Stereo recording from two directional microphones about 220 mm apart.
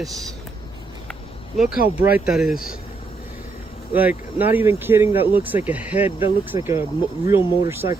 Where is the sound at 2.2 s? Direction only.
Centre (ahead or behind).